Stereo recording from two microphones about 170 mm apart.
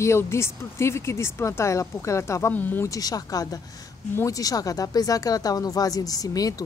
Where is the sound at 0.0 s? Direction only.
15° left (ahead or behind).